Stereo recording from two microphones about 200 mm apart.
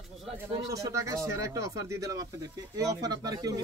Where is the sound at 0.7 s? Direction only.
15° right (ahead or behind).